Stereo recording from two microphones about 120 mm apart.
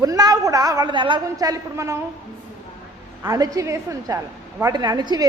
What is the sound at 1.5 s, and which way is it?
Speech, 30° right (ahead or behind).